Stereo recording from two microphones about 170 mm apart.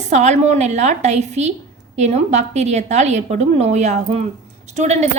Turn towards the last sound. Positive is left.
turn(degrees=-40)  # may be behind; listen again after turning